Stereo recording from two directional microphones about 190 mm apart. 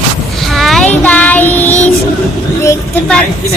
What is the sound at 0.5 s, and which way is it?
Child singing, centre (ahead or behind).